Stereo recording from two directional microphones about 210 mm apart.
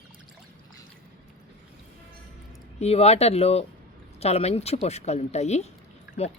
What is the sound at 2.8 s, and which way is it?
Speech, 30° left (ahead or behind).